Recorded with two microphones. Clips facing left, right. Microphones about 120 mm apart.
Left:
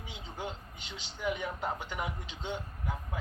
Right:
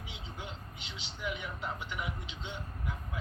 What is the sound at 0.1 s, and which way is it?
A man's voice, 40° left (ahead or behind).